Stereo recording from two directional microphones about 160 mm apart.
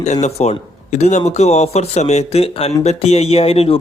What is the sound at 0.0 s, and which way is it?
A man's voice, 45° left (ahead or behind).